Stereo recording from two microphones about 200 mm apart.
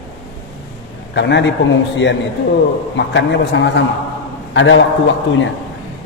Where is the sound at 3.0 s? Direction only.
60° left (ahead or behind).